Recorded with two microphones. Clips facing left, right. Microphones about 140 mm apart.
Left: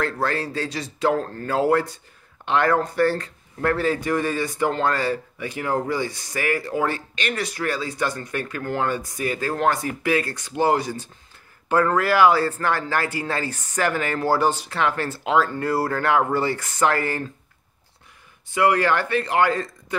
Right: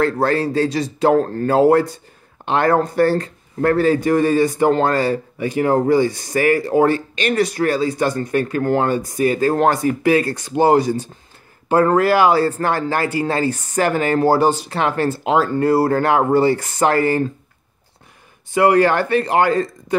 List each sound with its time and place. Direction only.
0.0 s speech: 35° right (ahead or behind)
18.5 s speech: 35° right (ahead or behind)